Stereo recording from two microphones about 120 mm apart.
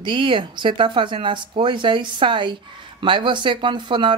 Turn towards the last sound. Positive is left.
turn(degrees=-40)  # may be behind; listen again after turning